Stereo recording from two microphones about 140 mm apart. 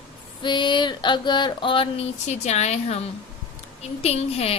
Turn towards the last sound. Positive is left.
turn(degrees=50)  # may be behind; listen again after turning